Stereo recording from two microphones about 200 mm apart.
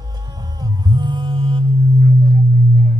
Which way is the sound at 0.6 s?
20° right (ahead or behind).